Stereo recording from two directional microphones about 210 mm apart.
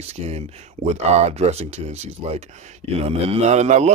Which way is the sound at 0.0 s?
30° right (ahead or behind).